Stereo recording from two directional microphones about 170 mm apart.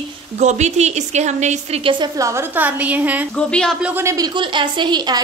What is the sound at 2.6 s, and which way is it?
Speech, 10° right (ahead or behind).